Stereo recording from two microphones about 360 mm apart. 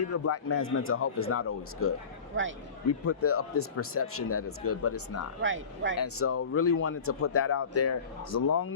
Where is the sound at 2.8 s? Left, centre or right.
Left.